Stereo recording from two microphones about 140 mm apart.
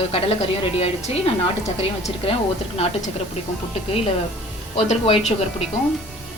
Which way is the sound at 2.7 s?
45° left (ahead or behind).